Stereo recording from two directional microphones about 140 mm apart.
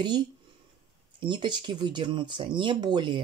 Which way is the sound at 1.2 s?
35° right (ahead or behind).